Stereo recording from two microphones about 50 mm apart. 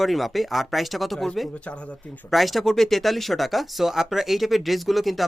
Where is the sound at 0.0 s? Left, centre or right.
Centre.